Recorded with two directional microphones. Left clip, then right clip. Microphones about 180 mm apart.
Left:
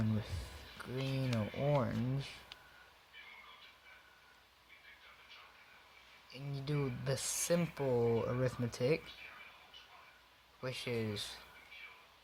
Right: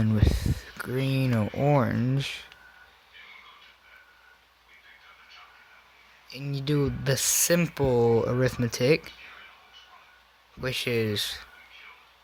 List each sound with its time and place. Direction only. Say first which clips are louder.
0.8 s a sound: right 11 dB; 45° right (ahead or behind)
6.2 s speech: right 13 dB; 45° right (ahead or behind)
10.6 s speech: right 12 dB; 45° right (ahead or behind)